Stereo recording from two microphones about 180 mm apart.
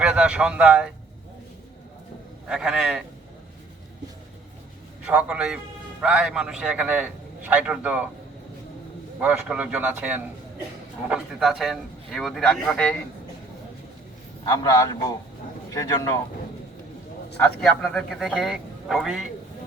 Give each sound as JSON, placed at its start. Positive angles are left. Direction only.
{"t": 0.0, "sound": "speech", "side_deg": -5}
{"t": 2.5, "sound": "a man's voice", "side_deg": -5}
{"t": 5.0, "sound": "a man's voice", "side_deg": -5}
{"t": 9.2, "sound": "a man's voice", "side_deg": -5}
{"t": 14.4, "sound": "a man's voice", "side_deg": 20}
{"t": 17.3, "sound": "a man's voice", "side_deg": 5}